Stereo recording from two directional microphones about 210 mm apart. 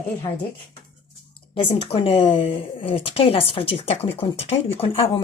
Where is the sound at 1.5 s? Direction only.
25° left (ahead or behind).